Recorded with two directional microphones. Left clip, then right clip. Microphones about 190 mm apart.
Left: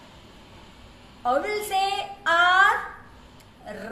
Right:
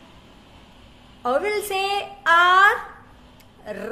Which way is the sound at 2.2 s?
50° right (ahead or behind).